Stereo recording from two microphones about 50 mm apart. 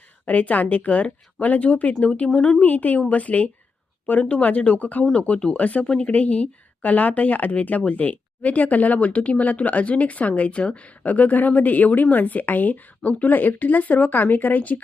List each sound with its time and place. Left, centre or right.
0.3 s speech: left
2.6 s speech: left